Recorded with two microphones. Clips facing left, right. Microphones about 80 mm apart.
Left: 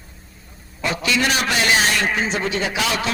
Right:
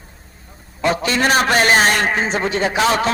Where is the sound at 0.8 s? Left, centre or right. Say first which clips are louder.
Right 4 dB; right.